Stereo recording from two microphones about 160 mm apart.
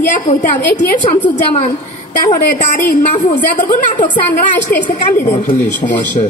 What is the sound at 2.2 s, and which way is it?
A woman's voice, 50° left (ahead or behind).